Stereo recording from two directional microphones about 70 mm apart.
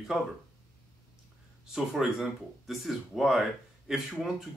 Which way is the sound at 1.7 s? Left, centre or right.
Centre.